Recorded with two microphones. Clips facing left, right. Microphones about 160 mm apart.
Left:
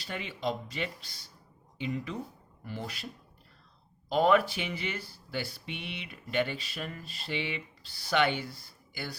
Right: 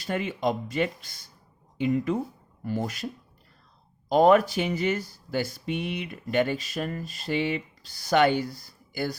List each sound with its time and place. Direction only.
0.0 s speech: 45° right (ahead or behind)
4.1 s speech: 45° right (ahead or behind)